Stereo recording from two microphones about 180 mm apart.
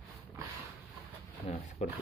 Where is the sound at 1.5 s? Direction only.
35° left (ahead or behind).